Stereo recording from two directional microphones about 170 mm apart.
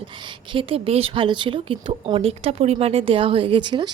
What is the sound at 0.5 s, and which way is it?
Speech, 35° right (ahead or behind).